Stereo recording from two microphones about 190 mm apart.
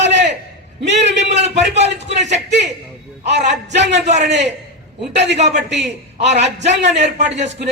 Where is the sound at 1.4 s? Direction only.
35° right (ahead or behind).